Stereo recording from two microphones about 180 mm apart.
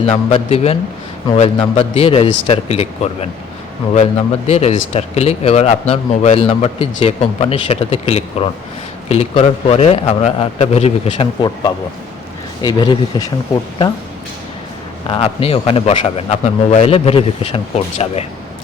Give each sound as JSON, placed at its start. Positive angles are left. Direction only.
{"t": 0.0, "sound": "a man's voice", "side_deg": 35}
{"t": 15.1, "sound": "a man's voice", "side_deg": 30}